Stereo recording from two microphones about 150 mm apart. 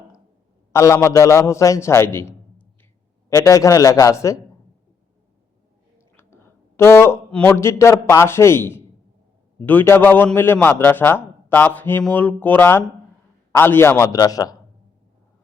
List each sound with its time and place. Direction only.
0.7 s a man's voice: 20° left (ahead or behind)
6.1 s a man's voice: 15° left (ahead or behind)